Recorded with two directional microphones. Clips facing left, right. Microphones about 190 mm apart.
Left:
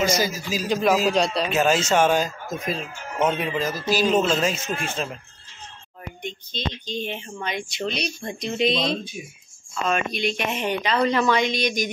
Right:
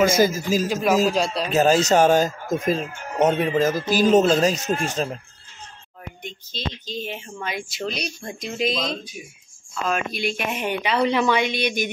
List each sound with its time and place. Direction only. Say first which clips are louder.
0.0 s a man's voice: right 5 dB; 50° right (ahead or behind)
1.1 s speech: left 1 dB; centre (ahead or behind)
1.5 s speech: right 6 dB; 35° right (ahead or behind)
6.2 s a woman's voice: left 2 dB; 5° right (ahead or behind)
11.5 s speech: even; 60° right (ahead or behind)